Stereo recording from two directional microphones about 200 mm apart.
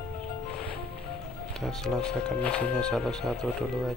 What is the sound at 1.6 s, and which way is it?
Speech, centre (ahead or behind).